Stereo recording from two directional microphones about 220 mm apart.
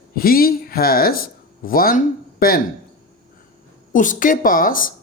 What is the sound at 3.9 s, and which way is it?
Speech, 35° left (ahead or behind).